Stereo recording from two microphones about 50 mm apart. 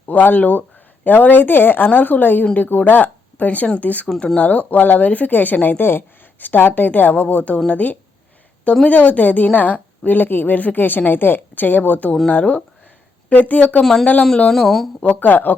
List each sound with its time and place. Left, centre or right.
0.0 s speech: left
13.8 s speech: centre
15.0 s speech: left